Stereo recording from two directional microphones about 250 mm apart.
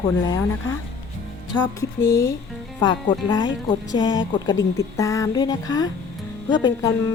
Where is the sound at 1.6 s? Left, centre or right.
Centre.